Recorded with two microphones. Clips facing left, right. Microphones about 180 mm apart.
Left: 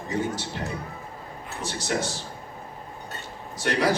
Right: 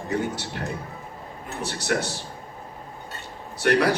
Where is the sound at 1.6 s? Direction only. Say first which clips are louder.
Right 2 dB; 65° right (ahead or behind).